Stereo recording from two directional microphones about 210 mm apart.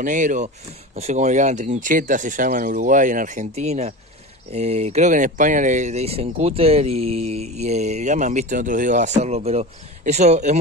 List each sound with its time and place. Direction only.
0.0 s speech: 35° right (ahead or behind)